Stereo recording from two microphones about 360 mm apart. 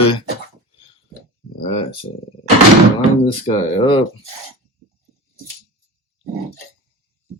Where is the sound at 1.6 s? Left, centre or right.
Centre.